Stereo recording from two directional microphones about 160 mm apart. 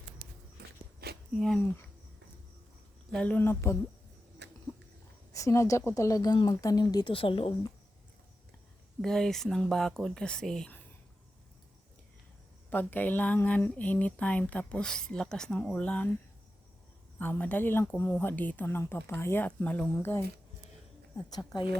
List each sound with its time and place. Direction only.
1.0 s a sound: 75° right (ahead or behind)
1.4 s speech: centre (ahead or behind)
3.1 s speech: 5° left (ahead or behind)
4.4 s a sound: 90° right
5.3 s speech: 20° left (ahead or behind)
9.0 s speech: 5° left (ahead or behind)
12.7 s speech: 10° left (ahead or behind)
17.2 s speech: 10° left (ahead or behind)
21.2 s speech: 25° left (ahead or behind)